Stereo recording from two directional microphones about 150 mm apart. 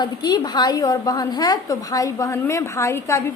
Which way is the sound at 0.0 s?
25° left (ahead or behind).